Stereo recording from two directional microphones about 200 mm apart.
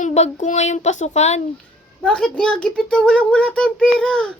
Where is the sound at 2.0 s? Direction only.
5° left (ahead or behind).